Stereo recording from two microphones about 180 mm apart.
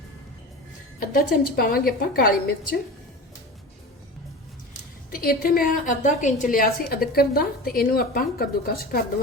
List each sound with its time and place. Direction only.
0.9 s a woman's voice: 55° left (ahead or behind)
5.1 s a woman's voice: 55° left (ahead or behind)